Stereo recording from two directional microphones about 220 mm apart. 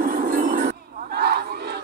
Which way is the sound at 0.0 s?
40° right (ahead or behind).